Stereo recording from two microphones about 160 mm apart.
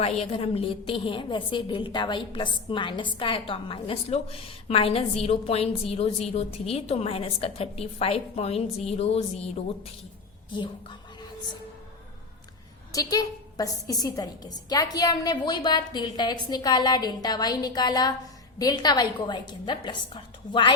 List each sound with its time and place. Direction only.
0.0 s a woman's voice: 40° left (ahead or behind)
12.9 s a woman's voice: 25° left (ahead or behind)